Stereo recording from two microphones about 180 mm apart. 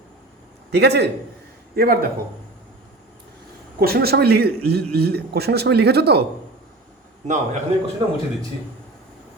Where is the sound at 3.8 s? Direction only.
60° right (ahead or behind).